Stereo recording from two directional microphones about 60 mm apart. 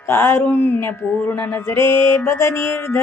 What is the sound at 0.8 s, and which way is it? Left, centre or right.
Mantra, left.